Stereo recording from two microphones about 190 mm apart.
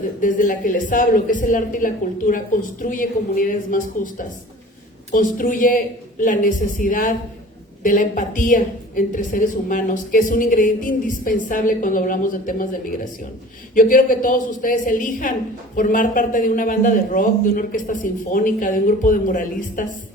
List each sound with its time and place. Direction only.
0.2 s a woman's voice: 45° left (ahead or behind)